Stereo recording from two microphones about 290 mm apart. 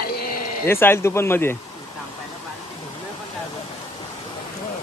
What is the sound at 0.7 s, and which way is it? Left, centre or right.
Speech, centre.